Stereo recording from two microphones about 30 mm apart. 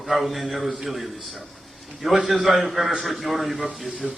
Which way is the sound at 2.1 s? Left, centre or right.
Centre.